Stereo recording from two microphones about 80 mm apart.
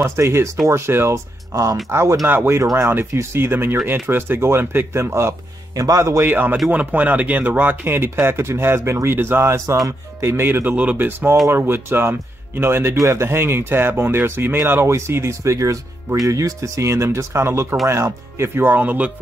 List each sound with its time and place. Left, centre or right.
0.0 s speech: right
1.9 s speech: right
2.6 s speech: right
2.9 s speech: right
5.8 s speech: right
6.2 s speech: right